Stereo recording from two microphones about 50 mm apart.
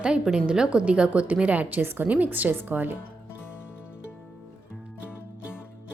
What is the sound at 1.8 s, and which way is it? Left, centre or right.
Speech, right.